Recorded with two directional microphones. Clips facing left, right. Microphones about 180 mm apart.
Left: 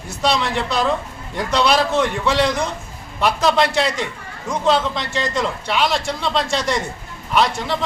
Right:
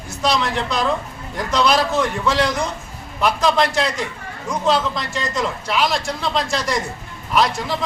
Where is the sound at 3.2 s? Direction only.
Centre (ahead or behind).